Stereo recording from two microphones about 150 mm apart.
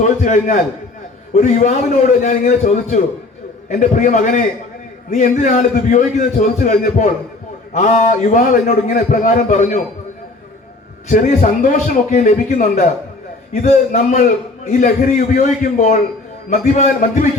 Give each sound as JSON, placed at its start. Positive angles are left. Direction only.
{"t": 0.0, "sound": "a man's voice", "side_deg": 55}
{"t": 11.1, "sound": "a man's voice", "side_deg": 60}